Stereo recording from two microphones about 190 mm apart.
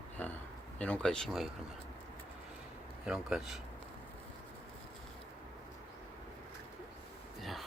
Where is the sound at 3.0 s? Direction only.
5° right (ahead or behind).